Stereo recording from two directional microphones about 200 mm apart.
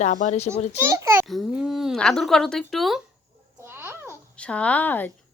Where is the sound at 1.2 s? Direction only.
Centre (ahead or behind).